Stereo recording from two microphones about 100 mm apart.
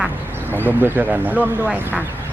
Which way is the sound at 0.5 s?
20° right (ahead or behind).